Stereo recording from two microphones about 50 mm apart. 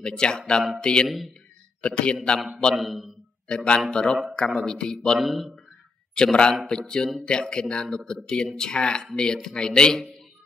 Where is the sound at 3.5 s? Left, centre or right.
Centre.